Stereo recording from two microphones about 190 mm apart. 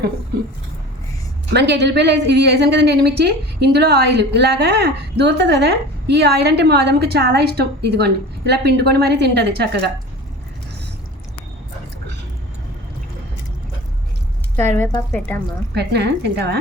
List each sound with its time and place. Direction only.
1.5 s a woman's voice: 65° right (ahead or behind)
14.5 s a woman's voice: 10° left (ahead or behind)
15.7 s a woman's voice: 60° right (ahead or behind)